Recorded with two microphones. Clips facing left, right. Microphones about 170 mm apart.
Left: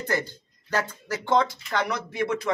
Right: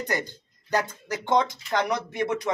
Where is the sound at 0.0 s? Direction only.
15° right (ahead or behind).